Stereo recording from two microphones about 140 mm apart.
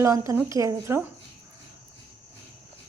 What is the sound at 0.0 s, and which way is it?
A woman's voice, 20° right (ahead or behind).